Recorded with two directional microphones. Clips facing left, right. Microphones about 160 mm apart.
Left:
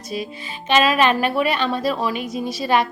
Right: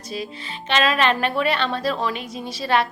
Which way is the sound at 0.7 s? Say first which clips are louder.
Left 3 dB; 10° left (ahead or behind).